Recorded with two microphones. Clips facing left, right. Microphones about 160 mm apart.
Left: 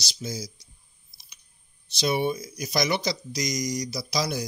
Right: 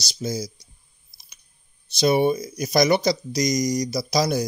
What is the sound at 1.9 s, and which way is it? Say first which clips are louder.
Speech: right 6 dB; 45° right (ahead or behind).